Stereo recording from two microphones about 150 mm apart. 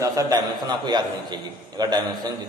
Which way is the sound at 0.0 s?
25° right (ahead or behind).